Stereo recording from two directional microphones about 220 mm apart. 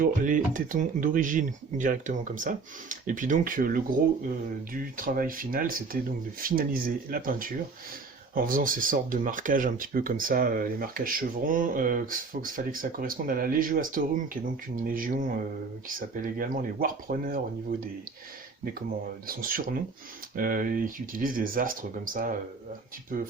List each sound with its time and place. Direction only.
0.0 s speech: 40° right (ahead or behind)
19.3 s speech: 40° right (ahead or behind)